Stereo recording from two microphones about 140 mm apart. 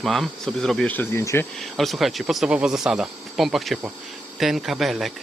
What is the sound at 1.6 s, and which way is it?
Speech, centre (ahead or behind).